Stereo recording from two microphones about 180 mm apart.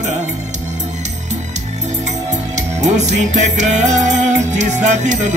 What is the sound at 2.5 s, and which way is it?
Music, 40° right (ahead or behind).